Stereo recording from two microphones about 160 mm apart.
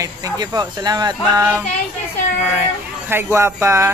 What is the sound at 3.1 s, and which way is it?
Speech, 15° right (ahead or behind).